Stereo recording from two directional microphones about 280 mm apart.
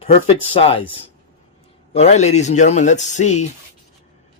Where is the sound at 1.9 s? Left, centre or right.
Left.